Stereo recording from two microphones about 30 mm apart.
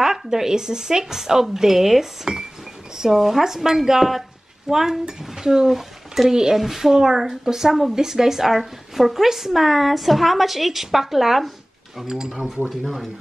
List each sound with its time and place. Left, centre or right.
0.0 s a woman's voice: centre
12.0 s a woman's voice: centre
12.8 s speech: centre